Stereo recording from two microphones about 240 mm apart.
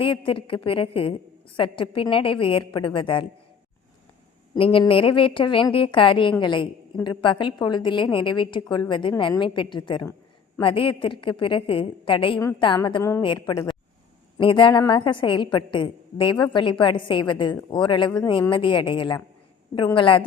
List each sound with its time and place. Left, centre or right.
0.0 s a woman's voice: left
4.5 s a woman's voice: left